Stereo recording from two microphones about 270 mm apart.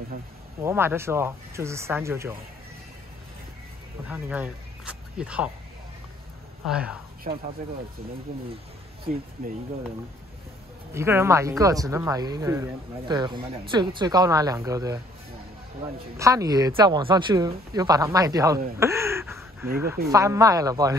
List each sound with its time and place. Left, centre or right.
0.6 s speech: centre
4.1 s speech: centre
6.6 s speech: centre
7.3 s speech: right
11.0 s speech: centre
16.2 s speech: centre
18.8 s a sound: centre
20.1 s speech: centre